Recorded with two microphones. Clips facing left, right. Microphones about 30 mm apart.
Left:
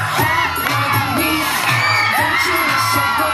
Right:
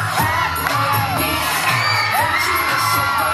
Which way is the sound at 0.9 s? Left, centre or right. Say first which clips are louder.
Left 2 dB; left.